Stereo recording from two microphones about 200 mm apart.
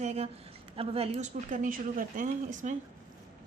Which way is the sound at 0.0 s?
35° right (ahead or behind).